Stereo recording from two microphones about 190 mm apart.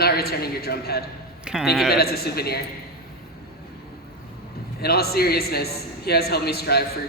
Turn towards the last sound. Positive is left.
turn(degrees=55)  # may be behind; listen again after turning